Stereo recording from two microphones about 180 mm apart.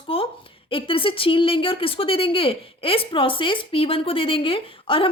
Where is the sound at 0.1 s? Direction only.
30° left (ahead or behind).